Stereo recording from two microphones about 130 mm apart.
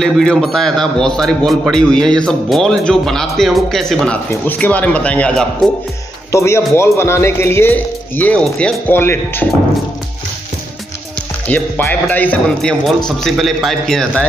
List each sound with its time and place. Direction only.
0.0 s a man's voice: 5° left (ahead or behind)
6.3 s a man's voice: 20° left (ahead or behind)
11.4 s a man's voice: 10° left (ahead or behind)